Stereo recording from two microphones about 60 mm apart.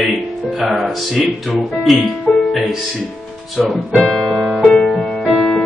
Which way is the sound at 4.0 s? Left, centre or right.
Centre.